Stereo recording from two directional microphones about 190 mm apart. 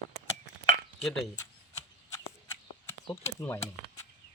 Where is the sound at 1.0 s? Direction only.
Centre (ahead or behind).